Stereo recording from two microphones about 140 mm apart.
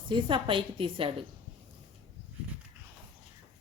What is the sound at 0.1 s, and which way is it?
A woman's voice, 35° right (ahead or behind).